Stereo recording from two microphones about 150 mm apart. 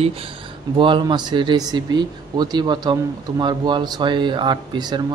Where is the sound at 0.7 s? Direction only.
35° right (ahead or behind).